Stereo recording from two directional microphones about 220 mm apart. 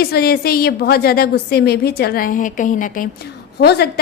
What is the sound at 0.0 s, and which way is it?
A woman's voice, 45° left (ahead or behind).